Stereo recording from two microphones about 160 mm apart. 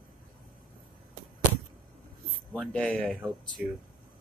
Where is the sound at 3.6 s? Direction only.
5° right (ahead or behind).